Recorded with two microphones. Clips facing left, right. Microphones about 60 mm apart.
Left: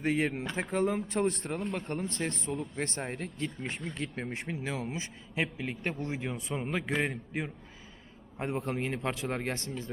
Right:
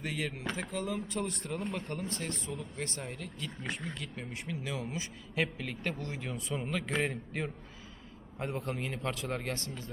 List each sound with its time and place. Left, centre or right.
0.0 s speech: left
1.5 s speech: centre
2.0 s a man's voice: left
6.9 s a man's voice: centre
8.4 s a man's voice: left